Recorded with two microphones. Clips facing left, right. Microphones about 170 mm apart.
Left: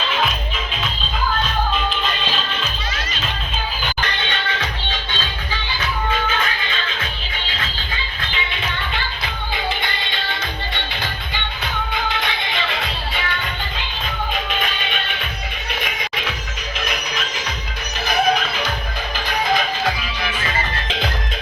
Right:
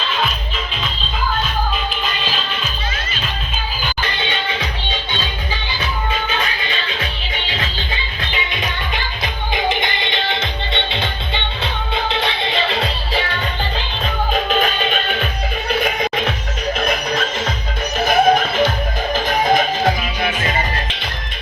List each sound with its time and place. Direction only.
8.3 s music: 15° right (ahead or behind); by 19.9 s 45° right (ahead or behind)